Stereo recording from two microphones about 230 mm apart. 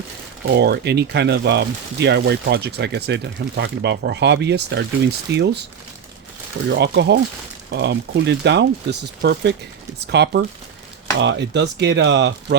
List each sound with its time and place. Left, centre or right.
0.4 s speech: right
6.7 s speech: right